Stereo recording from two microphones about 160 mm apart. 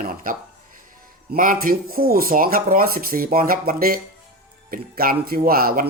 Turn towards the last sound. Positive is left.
turn(degrees=-65)  # may be behind; listen again after turning